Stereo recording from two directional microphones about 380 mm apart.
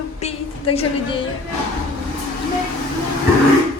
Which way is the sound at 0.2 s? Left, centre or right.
Centre.